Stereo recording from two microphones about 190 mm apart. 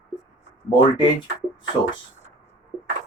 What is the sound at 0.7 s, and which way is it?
Speech, 25° left (ahead or behind).